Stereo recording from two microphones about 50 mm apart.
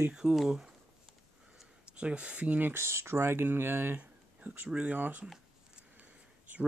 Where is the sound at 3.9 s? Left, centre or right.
Right.